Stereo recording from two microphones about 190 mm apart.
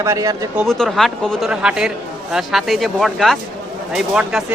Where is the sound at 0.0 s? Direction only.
15° right (ahead or behind).